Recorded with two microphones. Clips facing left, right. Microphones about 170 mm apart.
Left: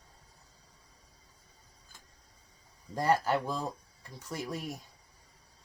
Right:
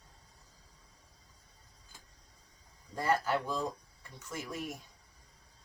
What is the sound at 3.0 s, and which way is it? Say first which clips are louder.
Speech: left 3 dB; 35° left (ahead or behind).